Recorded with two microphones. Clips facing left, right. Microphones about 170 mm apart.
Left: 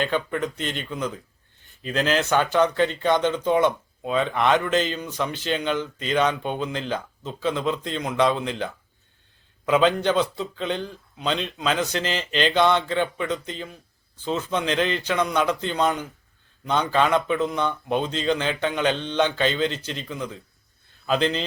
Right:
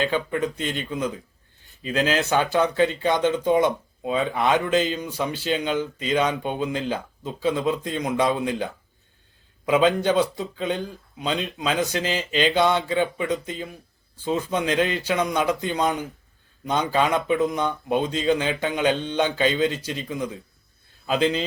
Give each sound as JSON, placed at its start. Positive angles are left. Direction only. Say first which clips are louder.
{"t": 0.0, "sound": "speech", "louder": "right 1 dB", "side_deg": -20}